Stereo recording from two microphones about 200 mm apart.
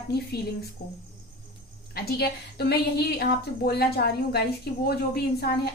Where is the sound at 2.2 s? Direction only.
50° left (ahead or behind).